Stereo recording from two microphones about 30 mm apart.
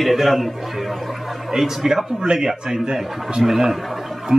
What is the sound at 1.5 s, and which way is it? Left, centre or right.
Speech, centre.